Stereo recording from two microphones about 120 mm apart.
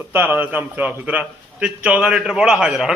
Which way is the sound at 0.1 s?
15° right (ahead or behind).